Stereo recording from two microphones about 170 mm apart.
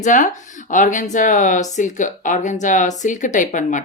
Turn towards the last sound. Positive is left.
turn(degrees=50)  # may be behind; listen again after turning